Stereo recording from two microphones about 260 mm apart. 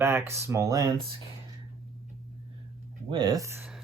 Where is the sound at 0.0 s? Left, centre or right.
Centre.